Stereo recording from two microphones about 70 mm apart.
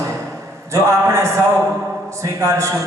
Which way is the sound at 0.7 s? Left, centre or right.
Right.